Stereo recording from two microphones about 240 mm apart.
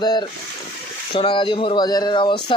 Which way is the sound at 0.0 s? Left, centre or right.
Centre.